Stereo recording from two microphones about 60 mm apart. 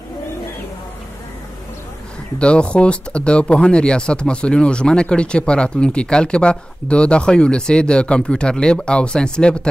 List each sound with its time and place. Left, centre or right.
2.3 s speech: centre